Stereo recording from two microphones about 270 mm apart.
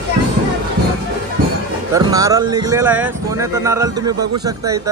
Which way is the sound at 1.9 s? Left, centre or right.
Centre.